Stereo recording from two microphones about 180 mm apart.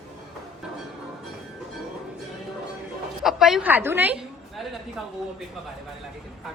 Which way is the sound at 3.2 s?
Centre (ahead or behind).